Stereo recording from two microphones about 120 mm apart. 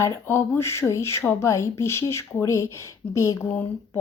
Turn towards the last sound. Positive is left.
turn(degrees=15)  # may be behind; listen again after turning